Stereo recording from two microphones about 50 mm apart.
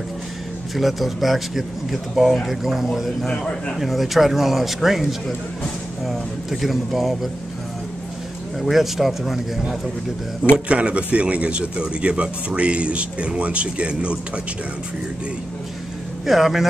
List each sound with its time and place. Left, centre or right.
0.7 s speech: centre
3.3 s a man's voice: centre
3.8 s speech: centre
8.5 s speech: centre
10.7 s speech: right
16.3 s a man's voice: centre